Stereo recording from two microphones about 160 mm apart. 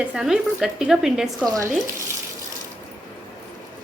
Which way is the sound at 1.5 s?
20° right (ahead or behind).